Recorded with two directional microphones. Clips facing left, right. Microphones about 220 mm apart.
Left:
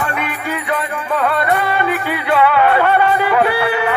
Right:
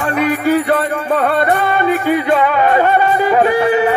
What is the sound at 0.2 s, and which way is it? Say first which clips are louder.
Music: right 10 dB; 40° right (ahead or behind).